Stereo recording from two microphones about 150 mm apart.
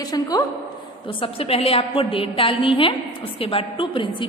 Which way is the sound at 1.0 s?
40° left (ahead or behind).